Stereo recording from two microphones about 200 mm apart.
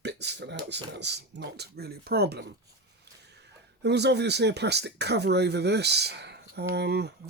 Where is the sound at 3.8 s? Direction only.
55° right (ahead or behind).